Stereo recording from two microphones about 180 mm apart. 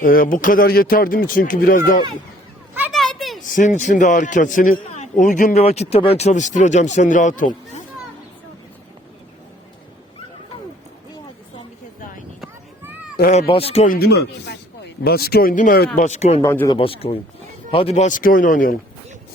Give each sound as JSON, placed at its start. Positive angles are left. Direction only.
{"t": 0.0, "sound": "a man's voice", "side_deg": 50}
{"t": 2.9, "sound": "a sound", "side_deg": 0}
{"t": 3.4, "sound": "a man's voice", "side_deg": 45}
{"t": 5.6, "sound": "speech", "side_deg": 35}
{"t": 12.4, "sound": "a sound", "side_deg": -10}
{"t": 13.5, "sound": "speech", "side_deg": 35}
{"t": 13.8, "sound": "speech", "side_deg": 55}
{"t": 16.0, "sound": "speech", "side_deg": 40}
{"t": 16.4, "sound": "speech", "side_deg": 15}
{"t": 16.7, "sound": "a man's voice", "side_deg": 30}